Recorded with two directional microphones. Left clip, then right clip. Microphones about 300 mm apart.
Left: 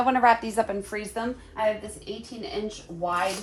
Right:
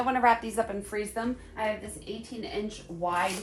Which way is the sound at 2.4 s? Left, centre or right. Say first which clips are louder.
Left 3 dB; centre.